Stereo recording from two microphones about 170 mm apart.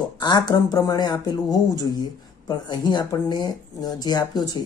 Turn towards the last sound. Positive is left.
turn(degrees=25)  # may be behind; listen again after turning